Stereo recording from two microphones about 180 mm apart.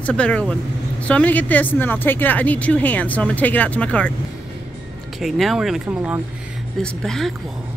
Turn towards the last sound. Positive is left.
turn(degrees=0)  # may be behind; listen again after turning